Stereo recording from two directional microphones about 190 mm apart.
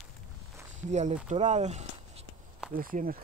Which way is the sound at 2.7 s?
50° right (ahead or behind).